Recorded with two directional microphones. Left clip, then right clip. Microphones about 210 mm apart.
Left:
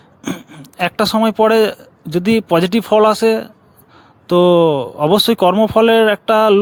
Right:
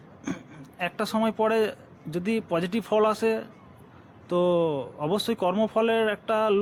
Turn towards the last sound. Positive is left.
turn(degrees=50)  # may be behind; listen again after turning